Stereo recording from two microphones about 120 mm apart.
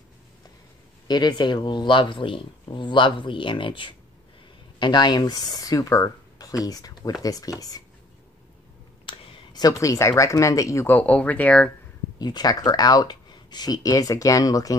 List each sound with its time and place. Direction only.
1.0 s speech: 35° left (ahead or behind)
9.0 s a sound: 45° left (ahead or behind)
9.6 s speech: 30° left (ahead or behind); by 11.7 s 10° left (ahead or behind)
12.2 s speech: 35° left (ahead or behind)